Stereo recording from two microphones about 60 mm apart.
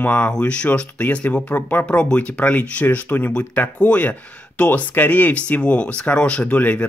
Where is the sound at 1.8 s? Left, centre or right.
Left.